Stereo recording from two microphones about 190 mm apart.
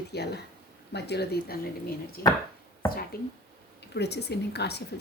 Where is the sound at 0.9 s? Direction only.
60° left (ahead or behind).